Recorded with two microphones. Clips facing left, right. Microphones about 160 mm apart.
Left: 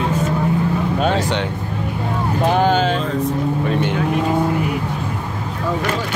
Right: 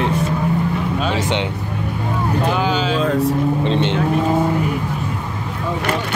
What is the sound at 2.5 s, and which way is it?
Speech, 50° left (ahead or behind).